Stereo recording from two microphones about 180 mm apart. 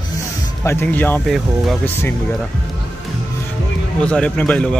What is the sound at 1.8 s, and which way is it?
Speech, 10° left (ahead or behind).